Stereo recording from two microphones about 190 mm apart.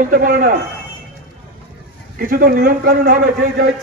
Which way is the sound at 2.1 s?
50° right (ahead or behind).